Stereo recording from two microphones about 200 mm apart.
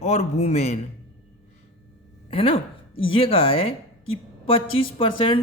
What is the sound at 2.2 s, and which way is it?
Speech, 30° left (ahead or behind).